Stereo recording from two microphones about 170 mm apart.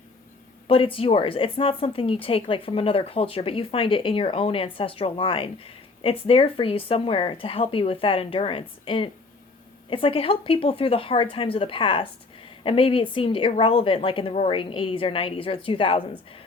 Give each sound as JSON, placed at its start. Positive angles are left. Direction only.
{"t": 0.7, "sound": "speech", "side_deg": 30}